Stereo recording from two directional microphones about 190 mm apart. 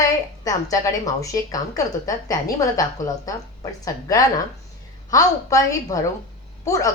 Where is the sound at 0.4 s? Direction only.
15° left (ahead or behind).